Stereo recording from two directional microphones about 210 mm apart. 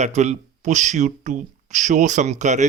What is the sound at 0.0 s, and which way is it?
Speech, 35° right (ahead or behind).